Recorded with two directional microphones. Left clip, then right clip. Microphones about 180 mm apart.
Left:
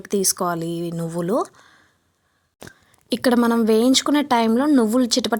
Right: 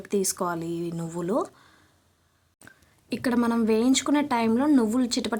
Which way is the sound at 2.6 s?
40° left (ahead or behind).